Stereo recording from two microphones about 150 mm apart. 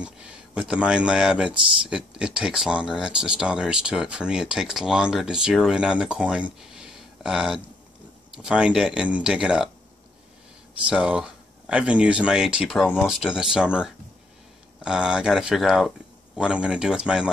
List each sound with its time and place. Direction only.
0.0 s speech: 5° right (ahead or behind)
10.9 s speech: 5° right (ahead or behind)